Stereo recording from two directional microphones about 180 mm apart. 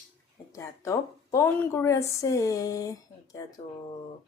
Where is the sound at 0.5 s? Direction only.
15° left (ahead or behind).